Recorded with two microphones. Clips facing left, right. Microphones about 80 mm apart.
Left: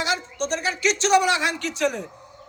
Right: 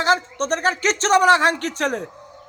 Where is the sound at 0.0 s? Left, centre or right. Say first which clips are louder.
Right 6 dB; right.